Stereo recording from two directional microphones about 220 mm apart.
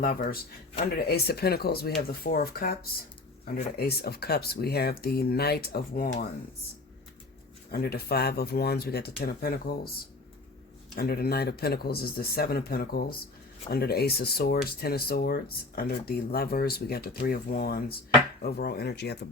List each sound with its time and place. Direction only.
0.0 s speech: 40° left (ahead or behind)
7.7 s speech: 45° left (ahead or behind)